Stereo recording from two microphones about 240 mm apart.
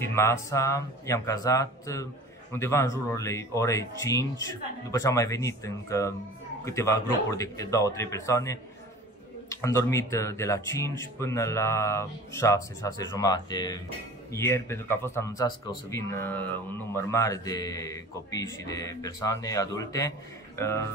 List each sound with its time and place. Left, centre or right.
0.0 s speech: centre